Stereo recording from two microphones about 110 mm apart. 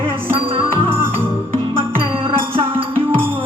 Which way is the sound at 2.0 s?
55° right (ahead or behind).